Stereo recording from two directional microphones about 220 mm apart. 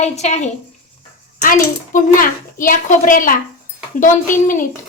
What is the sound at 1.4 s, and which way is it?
A woman's voice, 35° left (ahead or behind).